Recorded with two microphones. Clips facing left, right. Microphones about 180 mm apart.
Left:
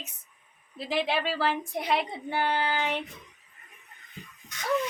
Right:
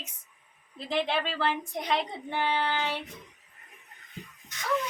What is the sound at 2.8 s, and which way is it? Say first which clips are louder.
Child singing: left 2 dB; 20° left (ahead or behind).